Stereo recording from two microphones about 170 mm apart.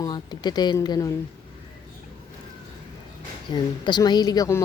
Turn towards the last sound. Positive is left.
turn(degrees=20)  # may be behind; listen again after turning